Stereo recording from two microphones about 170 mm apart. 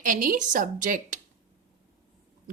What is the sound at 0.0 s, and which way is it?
A woman's voice, 50° right (ahead or behind).